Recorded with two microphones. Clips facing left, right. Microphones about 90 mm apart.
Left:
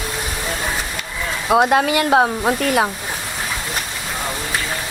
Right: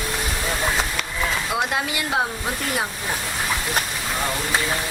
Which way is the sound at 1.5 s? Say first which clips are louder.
Left 10 dB; 55° left (ahead or behind).